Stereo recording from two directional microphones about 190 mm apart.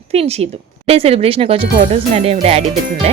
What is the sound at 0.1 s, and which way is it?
A woman's voice, 35° right (ahead or behind).